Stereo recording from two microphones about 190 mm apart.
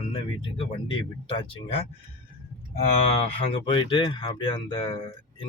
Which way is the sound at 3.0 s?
30° left (ahead or behind).